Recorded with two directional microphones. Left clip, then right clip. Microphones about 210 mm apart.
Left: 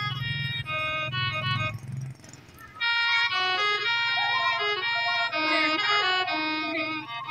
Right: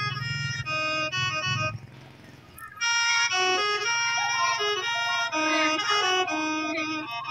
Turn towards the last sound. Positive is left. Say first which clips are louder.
# even
turn(degrees=-40)  # may be behind; listen again after turning